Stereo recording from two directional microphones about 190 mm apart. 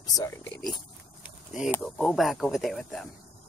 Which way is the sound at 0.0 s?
20° left (ahead or behind).